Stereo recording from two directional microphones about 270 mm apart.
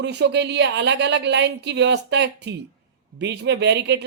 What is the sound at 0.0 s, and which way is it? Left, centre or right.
Speech, right.